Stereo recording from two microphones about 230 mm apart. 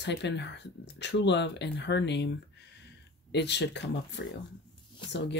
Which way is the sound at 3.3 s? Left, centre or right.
Left.